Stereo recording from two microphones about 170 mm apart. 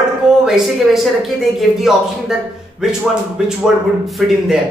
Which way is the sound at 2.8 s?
5° right (ahead or behind).